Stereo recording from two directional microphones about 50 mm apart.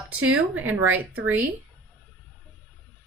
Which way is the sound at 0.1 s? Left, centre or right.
Right.